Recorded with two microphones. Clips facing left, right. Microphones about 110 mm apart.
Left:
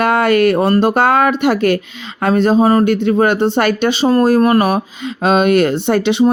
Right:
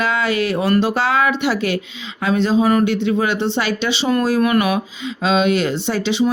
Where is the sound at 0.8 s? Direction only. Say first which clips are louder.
Left 5 dB; 50° left (ahead or behind).